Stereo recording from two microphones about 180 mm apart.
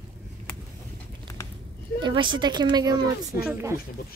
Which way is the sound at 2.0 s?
25° right (ahead or behind).